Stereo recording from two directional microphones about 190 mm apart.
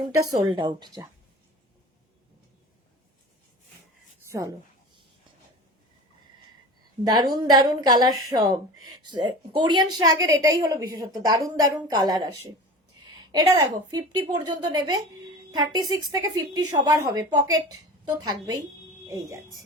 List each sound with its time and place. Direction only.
0.4 s a woman's voice: 25° right (ahead or behind)
4.3 s speech: 15° right (ahead or behind)
7.0 s a woman's voice: 20° right (ahead or behind)